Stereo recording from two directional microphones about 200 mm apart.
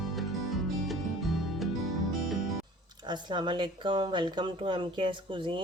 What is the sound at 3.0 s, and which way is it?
Speech, 20° right (ahead or behind).